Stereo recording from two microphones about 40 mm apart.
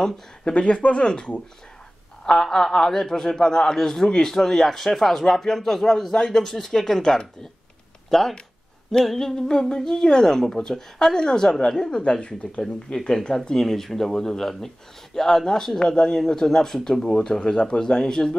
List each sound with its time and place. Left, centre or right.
0.5 s speech: left
2.4 s speech: centre
8.1 s speech: centre
12.0 s speech: left
12.6 s speech: centre
16.4 s speech: centre